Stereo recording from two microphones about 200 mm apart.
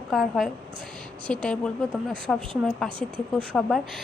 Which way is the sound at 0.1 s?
Centre (ahead or behind).